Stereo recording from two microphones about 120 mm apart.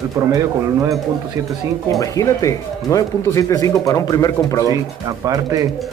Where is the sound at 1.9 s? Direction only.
30° left (ahead or behind).